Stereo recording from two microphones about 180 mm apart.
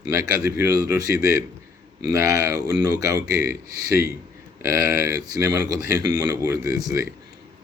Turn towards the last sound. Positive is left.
turn(degrees=-20)  # may be behind; listen again after turning